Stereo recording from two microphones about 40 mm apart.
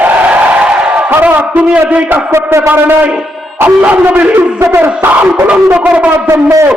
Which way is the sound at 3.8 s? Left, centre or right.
Right.